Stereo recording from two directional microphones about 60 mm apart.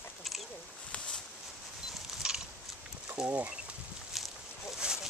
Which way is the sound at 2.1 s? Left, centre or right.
Centre.